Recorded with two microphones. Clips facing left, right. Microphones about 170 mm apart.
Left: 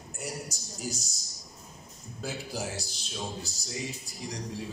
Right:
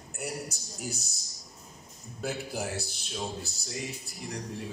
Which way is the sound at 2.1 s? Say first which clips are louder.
Right 2 dB; 60° right (ahead or behind).